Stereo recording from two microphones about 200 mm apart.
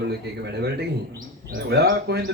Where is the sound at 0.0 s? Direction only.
55° right (ahead or behind).